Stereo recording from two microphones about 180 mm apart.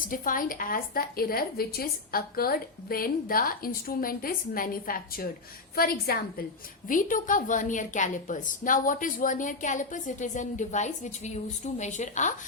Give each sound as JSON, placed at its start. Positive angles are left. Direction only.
{"t": 0.1, "sound": "a woman's voice", "side_deg": 50}